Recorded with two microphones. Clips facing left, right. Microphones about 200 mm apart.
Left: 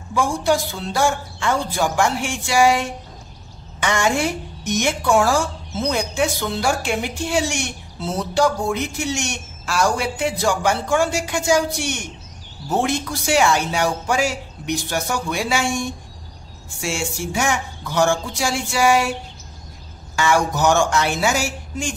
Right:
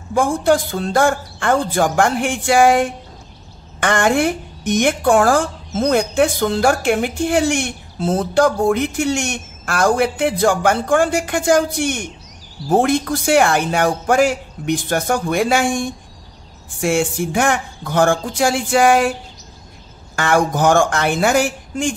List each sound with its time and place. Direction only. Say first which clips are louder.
0.1 s a woman's voice: right 4 dB; 55° right (ahead or behind)
20.2 s speech: right 3 dB; 55° right (ahead or behind)